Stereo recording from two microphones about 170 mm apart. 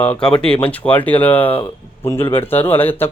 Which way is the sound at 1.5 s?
30° left (ahead or behind).